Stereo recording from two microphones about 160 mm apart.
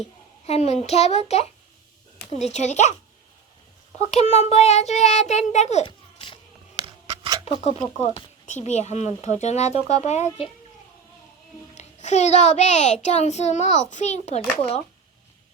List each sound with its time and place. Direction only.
0.4 s a child's voice: 40° left (ahead or behind)
2.3 s a child's voice: 45° left (ahead or behind)
3.9 s a child's voice: 40° left (ahead or behind)
6.7 s scissors: 30° right (ahead or behind)
7.4 s a child's voice: 40° left (ahead or behind)
11.7 s a child's voice: 45° left (ahead or behind)